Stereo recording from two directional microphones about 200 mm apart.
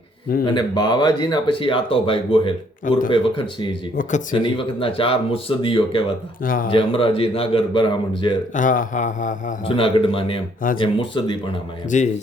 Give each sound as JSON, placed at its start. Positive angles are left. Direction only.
{"t": 0.4, "sound": "speech", "side_deg": 20}
{"t": 3.9, "sound": "a man's voice", "side_deg": 40}
{"t": 4.4, "sound": "speech", "side_deg": 25}
{"t": 6.4, "sound": "speech", "side_deg": 45}
{"t": 6.7, "sound": "speech", "side_deg": 25}
{"t": 8.5, "sound": "a man's voice", "side_deg": 40}
{"t": 9.7, "sound": "speech", "side_deg": 25}
{"t": 11.9, "sound": "a man's voice", "side_deg": 35}